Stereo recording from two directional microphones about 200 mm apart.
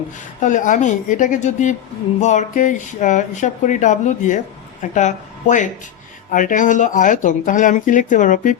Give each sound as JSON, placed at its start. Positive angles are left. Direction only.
{"t": 0.4, "sound": "speech", "side_deg": 40}